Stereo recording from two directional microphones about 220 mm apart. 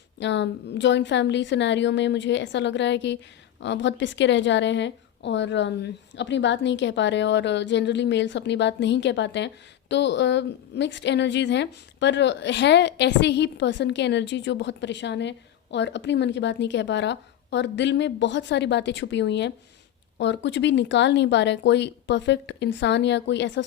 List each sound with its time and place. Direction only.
0.2 s a woman's voice: 55° left (ahead or behind)